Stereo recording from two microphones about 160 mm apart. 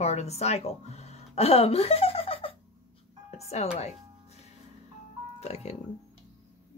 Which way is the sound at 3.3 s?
40° left (ahead or behind).